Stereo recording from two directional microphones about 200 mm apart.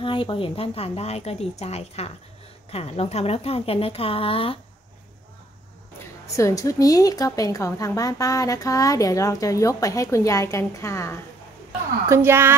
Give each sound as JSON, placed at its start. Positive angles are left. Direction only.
{"t": 0.0, "sound": "a woman's voice", "side_deg": 25}
{"t": 6.2, "sound": "a woman's voice", "side_deg": 15}
{"t": 12.1, "sound": "speech", "side_deg": -10}